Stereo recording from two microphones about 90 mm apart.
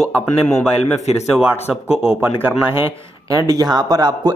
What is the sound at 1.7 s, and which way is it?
Speech, 10° right (ahead or behind).